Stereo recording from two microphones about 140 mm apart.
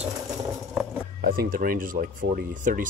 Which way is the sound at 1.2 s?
90° right.